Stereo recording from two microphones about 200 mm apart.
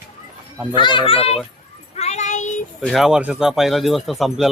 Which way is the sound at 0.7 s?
25° left (ahead or behind).